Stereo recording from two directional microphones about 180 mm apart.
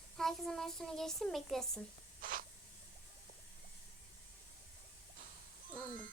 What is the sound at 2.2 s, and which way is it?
Spray, 50° right (ahead or behind).